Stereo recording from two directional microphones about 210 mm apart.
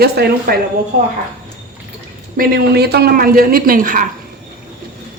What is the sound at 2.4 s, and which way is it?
Speech, 50° right (ahead or behind).